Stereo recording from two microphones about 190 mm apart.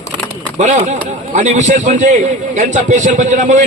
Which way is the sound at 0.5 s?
40° right (ahead or behind).